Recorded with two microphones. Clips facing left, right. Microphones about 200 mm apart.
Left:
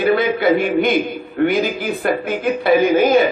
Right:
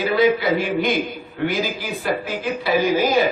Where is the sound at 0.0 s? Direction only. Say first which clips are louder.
Left 2 dB; 55° left (ahead or behind).